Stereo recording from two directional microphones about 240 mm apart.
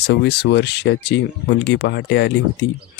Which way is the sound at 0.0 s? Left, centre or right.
Left.